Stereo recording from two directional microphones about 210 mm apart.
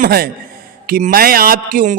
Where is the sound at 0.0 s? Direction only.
45° right (ahead or behind).